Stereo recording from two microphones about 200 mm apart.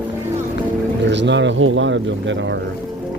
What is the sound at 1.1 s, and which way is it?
Speech, 60° right (ahead or behind).